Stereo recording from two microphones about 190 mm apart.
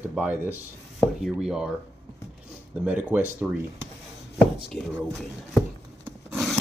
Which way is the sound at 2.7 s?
5° right (ahead or behind).